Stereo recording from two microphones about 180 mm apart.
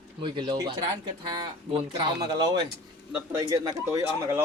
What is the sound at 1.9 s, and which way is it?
Speech, 25° right (ahead or behind).